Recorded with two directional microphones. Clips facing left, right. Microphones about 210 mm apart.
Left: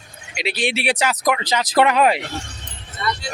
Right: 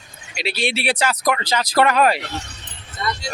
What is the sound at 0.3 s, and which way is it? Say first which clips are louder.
Speech: left 1 dB; 15° left (ahead or behind).